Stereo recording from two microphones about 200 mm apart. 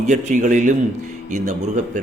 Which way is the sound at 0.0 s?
35° right (ahead or behind).